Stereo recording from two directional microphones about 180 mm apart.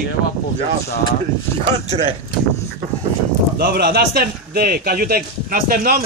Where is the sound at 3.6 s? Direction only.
60° right (ahead or behind).